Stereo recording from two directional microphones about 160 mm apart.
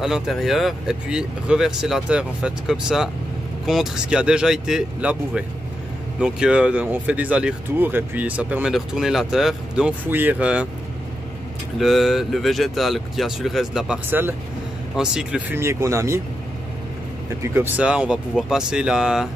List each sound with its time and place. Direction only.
0.0 s speech: centre (ahead or behind)
11.8 s speech: centre (ahead or behind); by 16.2 s 20° right (ahead or behind)
17.4 s speech: 10° right (ahead or behind)